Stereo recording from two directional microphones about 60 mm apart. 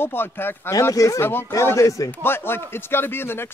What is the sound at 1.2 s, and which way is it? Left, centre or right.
Speech, left.